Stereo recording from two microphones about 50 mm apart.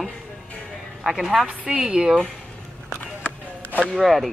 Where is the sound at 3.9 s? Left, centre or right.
Centre.